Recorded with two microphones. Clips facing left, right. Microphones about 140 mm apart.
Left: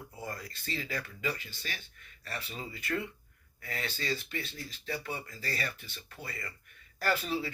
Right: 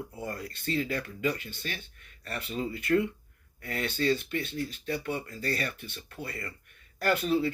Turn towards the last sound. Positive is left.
turn(degrees=-50)  # may be behind; listen again after turning